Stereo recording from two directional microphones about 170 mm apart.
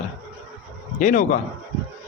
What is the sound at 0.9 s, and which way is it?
Speech, 50° left (ahead or behind).